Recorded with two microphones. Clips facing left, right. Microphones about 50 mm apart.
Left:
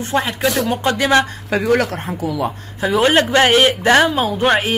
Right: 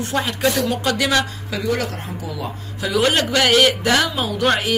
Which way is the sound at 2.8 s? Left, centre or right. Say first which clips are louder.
Left 4 dB; left.